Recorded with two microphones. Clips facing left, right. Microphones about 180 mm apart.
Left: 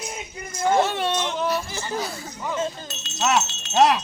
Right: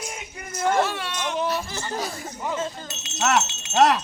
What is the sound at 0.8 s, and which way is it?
Speech, 25° left (ahead or behind).